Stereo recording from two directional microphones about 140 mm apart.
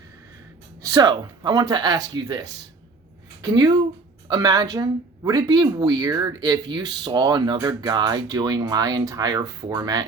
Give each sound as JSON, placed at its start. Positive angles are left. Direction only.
{"t": 0.8, "sound": "speech", "side_deg": -25}
{"t": 3.4, "sound": "speech", "side_deg": -30}